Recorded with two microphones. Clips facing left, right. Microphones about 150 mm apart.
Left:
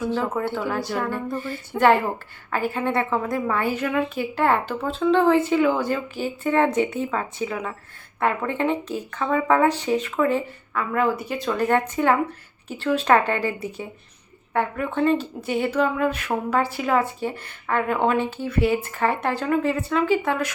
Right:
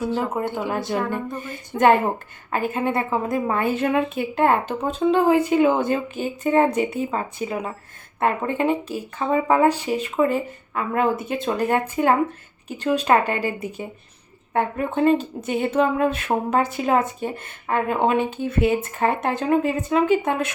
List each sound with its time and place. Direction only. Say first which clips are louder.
0.1 s speech: even; 15° right (ahead or behind)
7.4 s speech: right 1 dB; 30° right (ahead or behind)
8.2 s speech: right 2 dB; 15° right (ahead or behind)
9.1 s speech: right 2 dB; 25° right (ahead or behind)
9.5 s speech: even; 10° right (ahead or behind)
10.8 s speech: right 1 dB; 25° right (ahead or behind)
14.8 s speech: right 3 dB; 20° right (ahead or behind)